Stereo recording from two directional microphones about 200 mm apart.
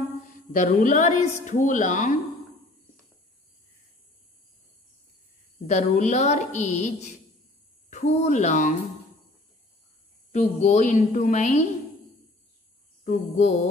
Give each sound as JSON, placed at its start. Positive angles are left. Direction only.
{"t": 0.5, "sound": "a woman's voice", "side_deg": 40}
{"t": 5.7, "sound": "a woman's voice", "side_deg": 35}
{"t": 10.3, "sound": "a woman's voice", "side_deg": 35}
{"t": 13.0, "sound": "a woman's voice", "side_deg": 35}